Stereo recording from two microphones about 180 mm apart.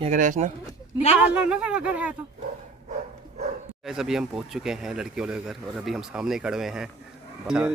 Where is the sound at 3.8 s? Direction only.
5° right (ahead or behind).